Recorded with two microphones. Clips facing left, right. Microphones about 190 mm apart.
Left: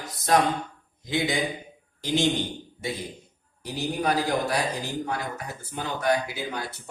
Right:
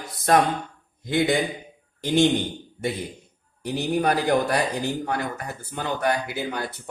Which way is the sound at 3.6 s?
55° right (ahead or behind).